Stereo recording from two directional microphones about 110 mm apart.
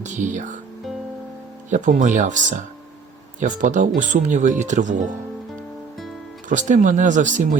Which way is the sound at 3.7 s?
90° right.